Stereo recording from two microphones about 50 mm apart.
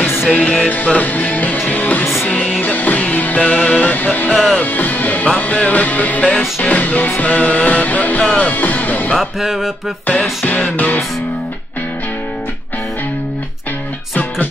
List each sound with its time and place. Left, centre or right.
0.3 s music: left
9.1 s music: centre
10.4 s music: left